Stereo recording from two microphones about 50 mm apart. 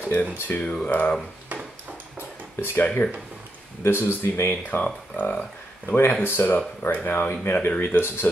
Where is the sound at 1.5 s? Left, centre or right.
Right.